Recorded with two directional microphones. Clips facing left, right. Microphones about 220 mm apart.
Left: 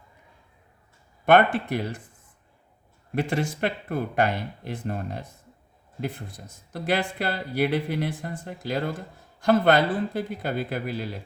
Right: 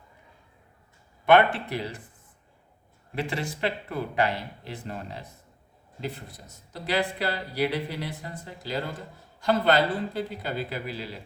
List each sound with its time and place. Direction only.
1.2 s speech: 50° left (ahead or behind)
3.2 s speech: 50° left (ahead or behind)
6.7 s speech: 50° left (ahead or behind)